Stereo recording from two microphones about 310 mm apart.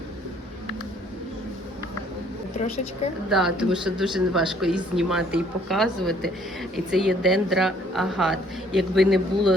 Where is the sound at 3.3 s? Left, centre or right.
Centre.